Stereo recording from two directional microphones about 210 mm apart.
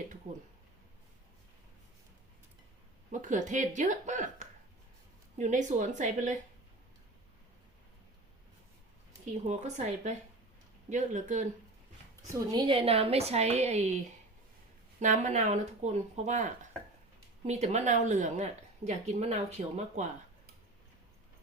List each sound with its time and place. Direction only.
3.1 s speech: 35° right (ahead or behind)
9.5 s speech: 35° right (ahead or behind)
12.3 s a woman's voice: 20° right (ahead or behind)
15.0 s speech: 35° right (ahead or behind)